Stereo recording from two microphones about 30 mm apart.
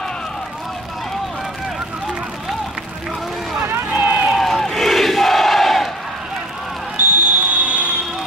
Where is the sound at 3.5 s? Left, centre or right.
Right.